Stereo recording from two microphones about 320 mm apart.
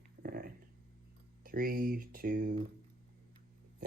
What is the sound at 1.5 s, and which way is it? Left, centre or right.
Speech, right.